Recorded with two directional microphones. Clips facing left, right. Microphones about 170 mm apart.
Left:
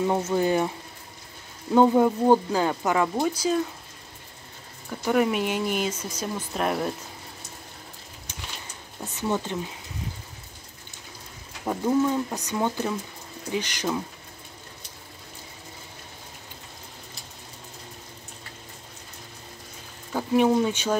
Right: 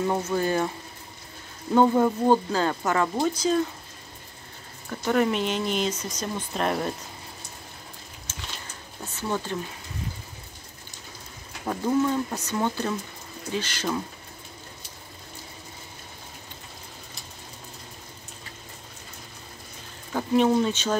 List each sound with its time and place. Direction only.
0.0 s speech: 15° left (ahead or behind)
1.7 s speech: 10° left (ahead or behind)
5.0 s speech: 10° left (ahead or behind)
8.3 s a sound: 15° left (ahead or behind)
9.1 s speech: 20° left (ahead or behind)
11.6 s speech: 10° left (ahead or behind)
20.1 s speech: 10° left (ahead or behind)